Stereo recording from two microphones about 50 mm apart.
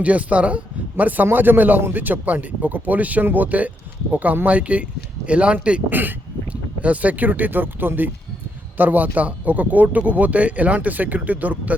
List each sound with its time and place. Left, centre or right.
0.0 s a man's voice: right
5.9 s a man's voice: right